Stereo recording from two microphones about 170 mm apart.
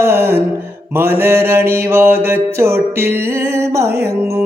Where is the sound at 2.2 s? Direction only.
15° right (ahead or behind).